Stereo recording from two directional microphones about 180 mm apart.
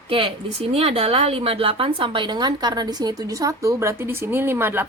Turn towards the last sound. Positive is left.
turn(degrees=-10)  # may be behind; listen again after turning